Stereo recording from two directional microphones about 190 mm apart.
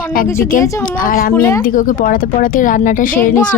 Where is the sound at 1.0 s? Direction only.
50° left (ahead or behind).